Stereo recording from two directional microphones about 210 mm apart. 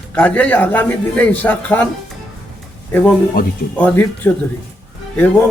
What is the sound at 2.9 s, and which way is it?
A man's voice, 10° left (ahead or behind).